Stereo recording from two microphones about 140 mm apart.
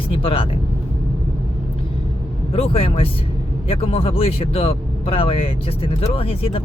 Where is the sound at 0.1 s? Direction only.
40° left (ahead or behind).